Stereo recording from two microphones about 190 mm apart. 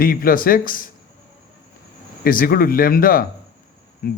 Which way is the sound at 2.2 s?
50° left (ahead or behind).